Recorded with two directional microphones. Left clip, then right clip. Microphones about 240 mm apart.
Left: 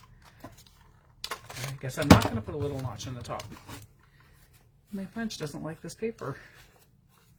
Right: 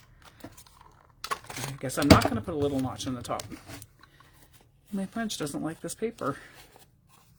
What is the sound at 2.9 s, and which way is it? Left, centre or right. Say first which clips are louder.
Speech: right 5 dB; right.